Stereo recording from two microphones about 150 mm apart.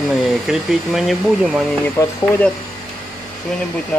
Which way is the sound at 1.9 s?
10° left (ahead or behind).